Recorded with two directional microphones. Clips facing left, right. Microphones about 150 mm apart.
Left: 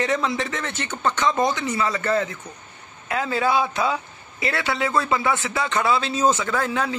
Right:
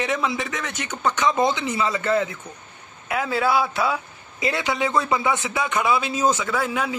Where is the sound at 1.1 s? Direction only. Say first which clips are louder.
Right 1 dB; 20° right (ahead or behind).